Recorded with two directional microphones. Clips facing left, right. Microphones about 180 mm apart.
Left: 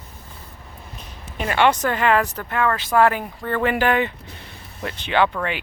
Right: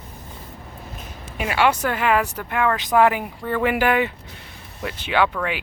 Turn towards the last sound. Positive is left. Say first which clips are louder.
# left 1 dB
turn(degrees=0)  # may be behind; listen again after turning